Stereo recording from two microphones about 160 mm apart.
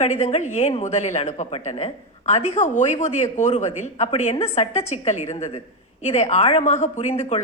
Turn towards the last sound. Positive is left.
turn(degrees=45)  # may be behind; listen again after turning